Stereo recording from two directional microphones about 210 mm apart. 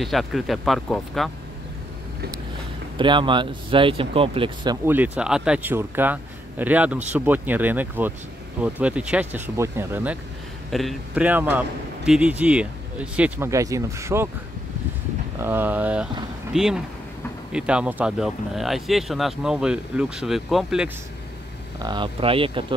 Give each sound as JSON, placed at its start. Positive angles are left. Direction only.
{"t": 0.0, "sound": "speech", "side_deg": 0}
{"t": 3.0, "sound": "speech", "side_deg": -25}
{"t": 4.8, "sound": "speech", "side_deg": -10}
{"t": 10.7, "sound": "speech", "side_deg": 0}
{"t": 15.4, "sound": "speech", "side_deg": -10}
{"t": 21.7, "sound": "speech", "side_deg": -20}